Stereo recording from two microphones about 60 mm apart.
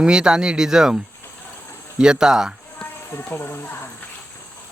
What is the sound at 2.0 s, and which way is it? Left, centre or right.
Speech, centre.